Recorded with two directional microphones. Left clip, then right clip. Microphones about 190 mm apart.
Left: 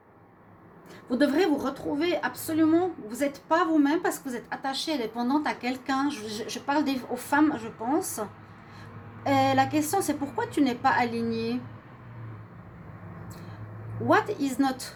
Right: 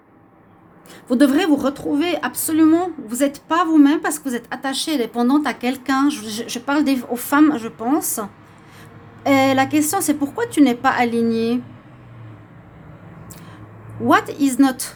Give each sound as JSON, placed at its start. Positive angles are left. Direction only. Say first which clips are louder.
{"t": 1.0, "sound": "a woman's voice", "louder": "right 8 dB", "side_deg": -55}
{"t": 14.1, "sound": "a woman's voice", "louder": "right 7 dB", "side_deg": -50}